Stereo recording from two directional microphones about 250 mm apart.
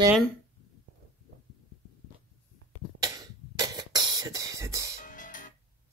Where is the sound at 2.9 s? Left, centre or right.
Centre.